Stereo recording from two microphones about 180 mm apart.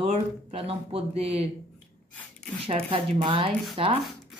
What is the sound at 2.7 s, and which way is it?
Speech, 30° right (ahead or behind).